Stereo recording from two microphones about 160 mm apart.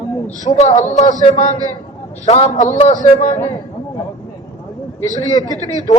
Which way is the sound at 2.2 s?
40° left (ahead or behind).